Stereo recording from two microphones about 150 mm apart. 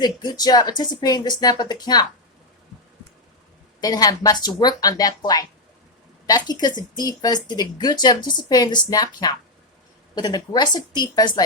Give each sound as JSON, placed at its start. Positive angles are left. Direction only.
{"t": 0.0, "sound": "speech", "side_deg": 25}
{"t": 3.8, "sound": "speech", "side_deg": 25}